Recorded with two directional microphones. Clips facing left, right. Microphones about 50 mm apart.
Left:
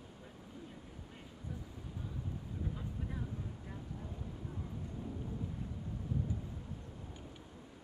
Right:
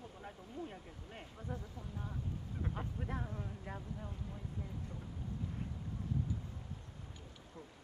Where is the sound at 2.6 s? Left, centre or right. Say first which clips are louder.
Right 1 dB; right.